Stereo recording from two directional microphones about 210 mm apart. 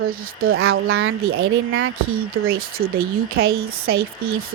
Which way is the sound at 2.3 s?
45° right (ahead or behind).